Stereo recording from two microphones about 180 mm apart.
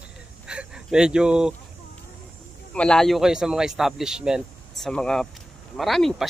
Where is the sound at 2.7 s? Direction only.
5° left (ahead or behind).